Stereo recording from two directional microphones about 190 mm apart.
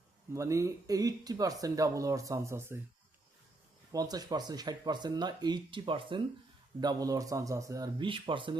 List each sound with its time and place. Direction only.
0.3 s speech: 15° right (ahead or behind)
3.9 s speech: 20° right (ahead or behind)